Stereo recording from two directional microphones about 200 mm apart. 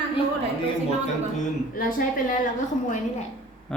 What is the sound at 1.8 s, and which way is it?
Speech, 45° left (ahead or behind).